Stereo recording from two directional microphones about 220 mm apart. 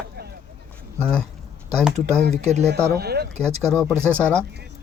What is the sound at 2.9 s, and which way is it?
Speech, 45° right (ahead or behind).